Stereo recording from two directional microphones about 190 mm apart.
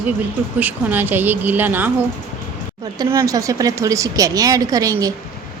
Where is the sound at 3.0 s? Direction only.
15° right (ahead or behind).